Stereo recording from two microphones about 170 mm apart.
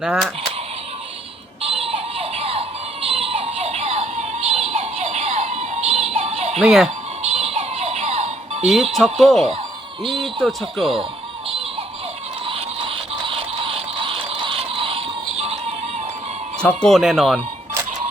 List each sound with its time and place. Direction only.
0.0 s speech: 5° right (ahead or behind)
1.6 s music: 35° right (ahead or behind)
6.6 s speech: 5° right (ahead or behind)
7.2 s music: 40° right (ahead or behind)
8.7 s speech: centre (ahead or behind)
12.5 s a sound: 30° right (ahead or behind)
16.6 s speech: 5° left (ahead or behind)